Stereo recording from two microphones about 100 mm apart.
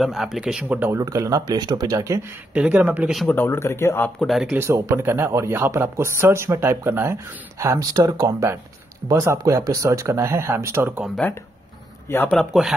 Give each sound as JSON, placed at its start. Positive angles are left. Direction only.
{"t": 0.0, "sound": "speech", "side_deg": 0}
{"t": 0.9, "sound": "speech", "side_deg": -35}
{"t": 2.5, "sound": "speech", "side_deg": -15}
{"t": 3.3, "sound": "speech", "side_deg": 25}
{"t": 4.2, "sound": "speech", "side_deg": 0}
{"t": 4.6, "sound": "speech", "side_deg": -30}
{"t": 12.1, "sound": "speech", "side_deg": 25}
{"t": 12.5, "sound": "speech", "side_deg": -5}